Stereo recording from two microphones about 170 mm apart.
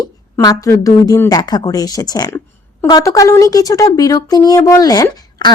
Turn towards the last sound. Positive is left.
turn(degrees=20)  # may be behind; listen again after turning